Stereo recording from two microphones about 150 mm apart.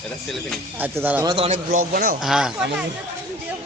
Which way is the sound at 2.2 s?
5° right (ahead or behind).